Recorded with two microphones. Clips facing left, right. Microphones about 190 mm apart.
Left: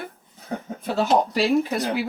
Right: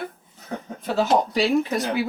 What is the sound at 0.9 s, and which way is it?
Speech, centre (ahead or behind).